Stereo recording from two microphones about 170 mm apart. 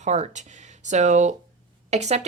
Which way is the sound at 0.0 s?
45° right (ahead or behind).